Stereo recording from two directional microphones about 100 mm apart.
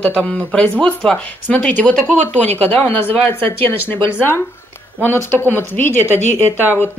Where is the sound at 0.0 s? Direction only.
10° left (ahead or behind).